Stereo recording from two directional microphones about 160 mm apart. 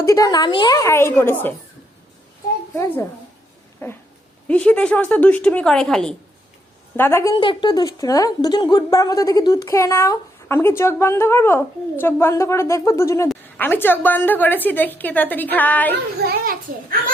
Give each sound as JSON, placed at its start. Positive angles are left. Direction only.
{"t": 0.0, "sound": "a woman's voice", "side_deg": 20}
{"t": 2.7, "sound": "a woman's voice", "side_deg": 15}
{"t": 6.9, "sound": "a woman's voice", "side_deg": 15}
{"t": 7.3, "sound": "a woman's voice", "side_deg": 30}
{"t": 16.2, "sound": "a child's voice", "side_deg": -70}